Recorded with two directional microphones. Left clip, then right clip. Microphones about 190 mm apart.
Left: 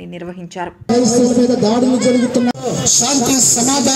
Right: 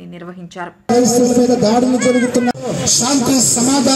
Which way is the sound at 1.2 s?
15° left (ahead or behind).